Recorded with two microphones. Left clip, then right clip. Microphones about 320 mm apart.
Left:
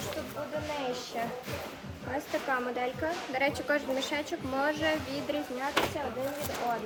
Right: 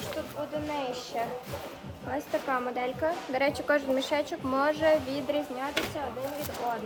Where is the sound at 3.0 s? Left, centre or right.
Centre.